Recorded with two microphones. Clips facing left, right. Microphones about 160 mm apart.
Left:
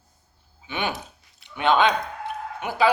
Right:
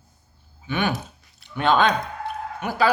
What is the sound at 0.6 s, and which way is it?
Speech, 20° left (ahead or behind).